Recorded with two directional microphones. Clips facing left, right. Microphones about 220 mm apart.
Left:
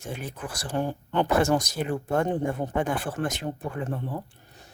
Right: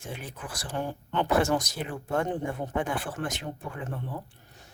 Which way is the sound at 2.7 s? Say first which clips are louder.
Left 3 dB; 45° left (ahead or behind).